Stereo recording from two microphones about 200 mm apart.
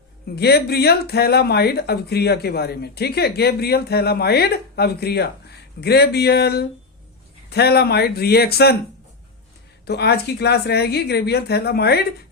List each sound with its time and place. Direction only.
0.3 s speech: 55° left (ahead or behind)
9.8 s a woman's voice: 55° left (ahead or behind)